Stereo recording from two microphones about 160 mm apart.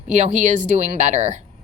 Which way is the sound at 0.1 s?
50° right (ahead or behind).